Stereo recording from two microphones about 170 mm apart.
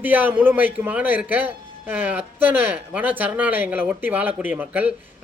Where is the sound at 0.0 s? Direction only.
10° right (ahead or behind).